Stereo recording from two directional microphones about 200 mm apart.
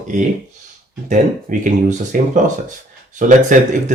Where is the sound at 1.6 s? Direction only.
40° right (ahead or behind).